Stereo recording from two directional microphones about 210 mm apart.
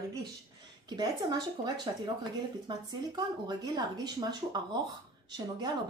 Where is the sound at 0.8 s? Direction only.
20° right (ahead or behind).